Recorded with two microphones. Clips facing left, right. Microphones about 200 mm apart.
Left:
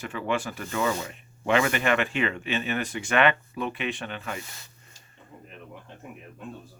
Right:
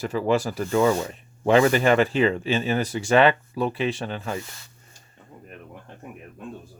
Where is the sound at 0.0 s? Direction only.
35° right (ahead or behind).